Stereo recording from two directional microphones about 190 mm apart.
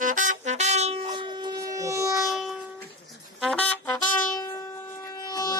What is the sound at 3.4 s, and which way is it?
Brass instrument, 5° left (ahead or behind).